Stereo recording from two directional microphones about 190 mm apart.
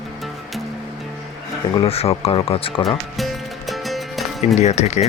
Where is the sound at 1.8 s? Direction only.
30° left (ahead or behind).